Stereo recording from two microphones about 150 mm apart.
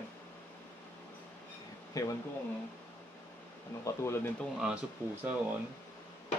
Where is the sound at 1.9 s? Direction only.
25° left (ahead or behind).